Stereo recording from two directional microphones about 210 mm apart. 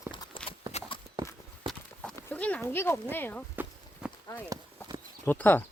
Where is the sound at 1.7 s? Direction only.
5° left (ahead or behind).